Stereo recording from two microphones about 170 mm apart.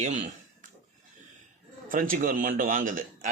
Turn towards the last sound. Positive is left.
turn(degrees=-50)  # may be behind; listen again after turning